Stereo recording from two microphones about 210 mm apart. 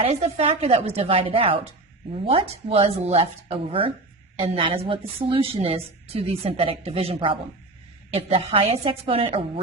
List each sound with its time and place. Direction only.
0.0 s a woman's voice: 30° right (ahead or behind)